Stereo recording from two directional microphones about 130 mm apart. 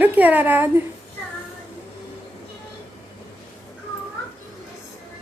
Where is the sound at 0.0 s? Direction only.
15° right (ahead or behind).